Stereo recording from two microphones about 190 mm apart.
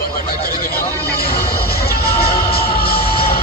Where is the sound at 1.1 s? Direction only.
55° left (ahead or behind).